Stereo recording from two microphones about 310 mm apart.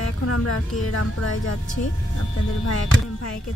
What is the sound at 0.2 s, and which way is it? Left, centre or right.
Speech, left.